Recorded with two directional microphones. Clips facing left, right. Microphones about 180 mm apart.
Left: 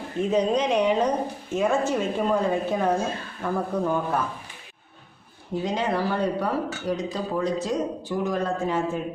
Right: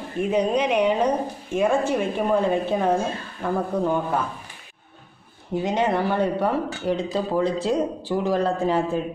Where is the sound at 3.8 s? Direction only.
20° right (ahead or behind).